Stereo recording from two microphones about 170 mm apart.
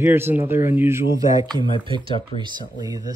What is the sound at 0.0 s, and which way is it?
Speech, 15° right (ahead or behind).